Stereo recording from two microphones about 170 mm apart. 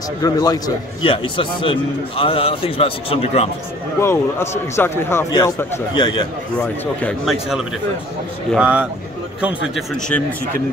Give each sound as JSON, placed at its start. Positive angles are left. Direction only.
{"t": 0.2, "sound": "a man's voice", "side_deg": 20}
{"t": 4.0, "sound": "speech", "side_deg": 15}
{"t": 6.6, "sound": "a man's voice", "side_deg": 5}